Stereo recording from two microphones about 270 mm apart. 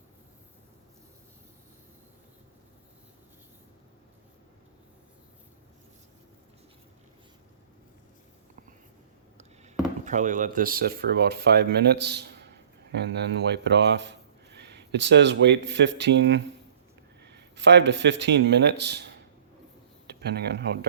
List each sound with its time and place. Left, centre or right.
10.0 s speech: right